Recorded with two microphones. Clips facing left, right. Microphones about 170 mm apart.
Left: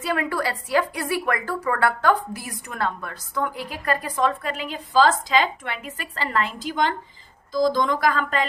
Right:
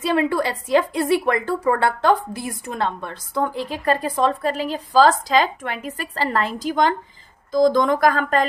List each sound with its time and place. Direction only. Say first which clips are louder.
0.0 s a woman's voice: right 5 dB; 25° right (ahead or behind); by 8.4 s 45° right (ahead or behind)